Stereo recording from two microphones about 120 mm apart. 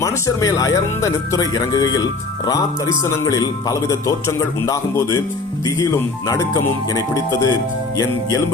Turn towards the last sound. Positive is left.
turn(degrees=30)  # may be behind; listen again after turning